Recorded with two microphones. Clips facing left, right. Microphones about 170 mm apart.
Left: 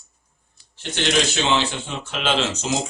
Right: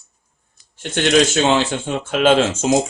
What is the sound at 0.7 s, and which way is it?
Speech, 50° right (ahead or behind).